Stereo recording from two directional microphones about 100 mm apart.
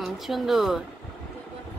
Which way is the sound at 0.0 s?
Centre (ahead or behind).